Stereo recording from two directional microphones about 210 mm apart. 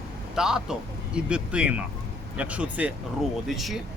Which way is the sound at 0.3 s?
5° right (ahead or behind).